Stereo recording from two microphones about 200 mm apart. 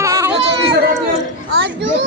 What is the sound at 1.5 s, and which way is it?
Speech, 65° right (ahead or behind).